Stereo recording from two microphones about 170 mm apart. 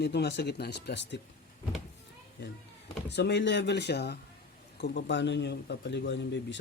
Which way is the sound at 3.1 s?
85° left.